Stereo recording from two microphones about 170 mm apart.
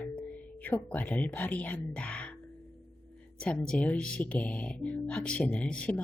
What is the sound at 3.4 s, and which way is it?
Speech, 5° left (ahead or behind).